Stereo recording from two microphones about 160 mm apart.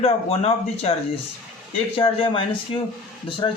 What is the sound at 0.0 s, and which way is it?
Speech, 40° left (ahead or behind).